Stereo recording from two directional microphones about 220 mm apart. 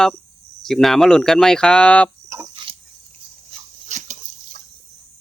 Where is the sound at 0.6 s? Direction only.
Centre (ahead or behind).